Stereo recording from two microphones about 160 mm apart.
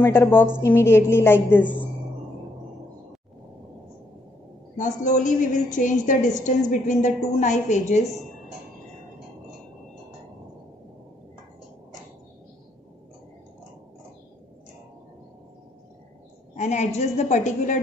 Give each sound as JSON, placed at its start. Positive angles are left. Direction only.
{"t": 0.0, "sound": "a woman's voice", "side_deg": 15}
{"t": 4.7, "sound": "a woman's voice", "side_deg": 50}
{"t": 16.5, "sound": "a woman's voice", "side_deg": 45}